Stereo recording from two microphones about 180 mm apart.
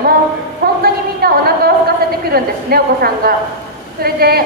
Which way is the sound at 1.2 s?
60° right (ahead or behind).